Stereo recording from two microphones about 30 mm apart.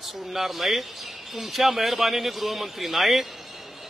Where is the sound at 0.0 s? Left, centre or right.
Centre.